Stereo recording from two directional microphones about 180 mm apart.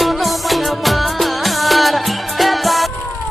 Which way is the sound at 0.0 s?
Centre (ahead or behind).